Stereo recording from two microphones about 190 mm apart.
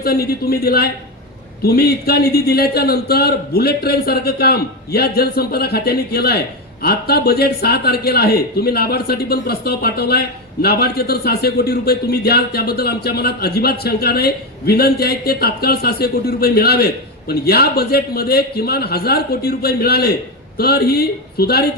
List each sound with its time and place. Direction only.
0.0 s a man's voice: 55° left (ahead or behind)